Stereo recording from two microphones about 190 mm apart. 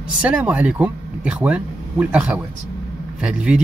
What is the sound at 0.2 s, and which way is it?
Speech, 5° right (ahead or behind).